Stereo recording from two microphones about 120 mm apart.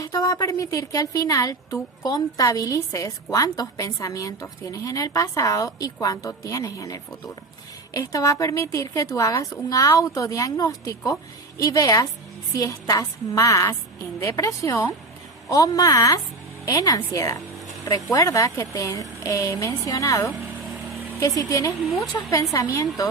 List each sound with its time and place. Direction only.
0.0 s a woman's voice: 30° left (ahead or behind)